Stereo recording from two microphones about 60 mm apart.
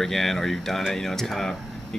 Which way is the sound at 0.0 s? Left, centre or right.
Centre.